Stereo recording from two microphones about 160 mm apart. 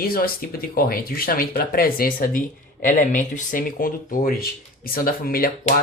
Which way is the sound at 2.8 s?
55° left (ahead or behind).